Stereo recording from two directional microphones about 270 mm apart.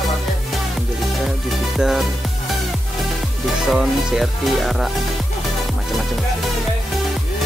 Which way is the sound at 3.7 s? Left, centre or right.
Centre.